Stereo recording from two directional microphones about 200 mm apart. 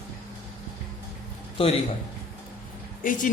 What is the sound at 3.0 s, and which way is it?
Speech, 40° left (ahead or behind).